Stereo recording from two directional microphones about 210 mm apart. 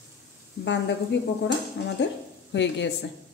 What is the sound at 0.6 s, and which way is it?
A woman's voice, 55° left (ahead or behind).